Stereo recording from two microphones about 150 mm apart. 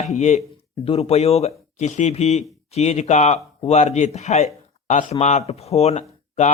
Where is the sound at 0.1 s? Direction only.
50° left (ahead or behind).